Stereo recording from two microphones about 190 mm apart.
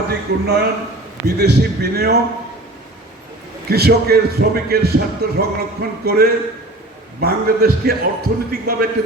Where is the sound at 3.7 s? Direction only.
55° right (ahead or behind).